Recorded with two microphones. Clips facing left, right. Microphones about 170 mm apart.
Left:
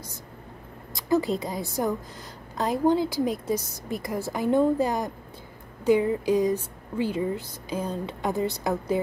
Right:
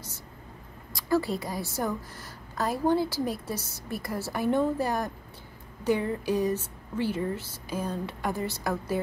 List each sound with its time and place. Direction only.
0.9 s a woman's voice: 20° left (ahead or behind)